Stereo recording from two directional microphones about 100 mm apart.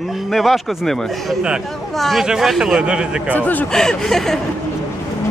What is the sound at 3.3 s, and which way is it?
Speech, 15° left (ahead or behind).